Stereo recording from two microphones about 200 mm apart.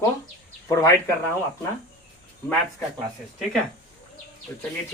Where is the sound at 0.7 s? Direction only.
15° left (ahead or behind).